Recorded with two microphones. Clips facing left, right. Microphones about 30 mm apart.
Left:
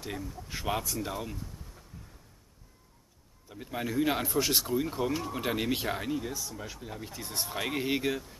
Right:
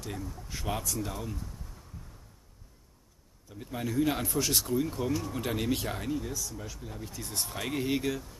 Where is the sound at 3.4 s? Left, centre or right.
Centre.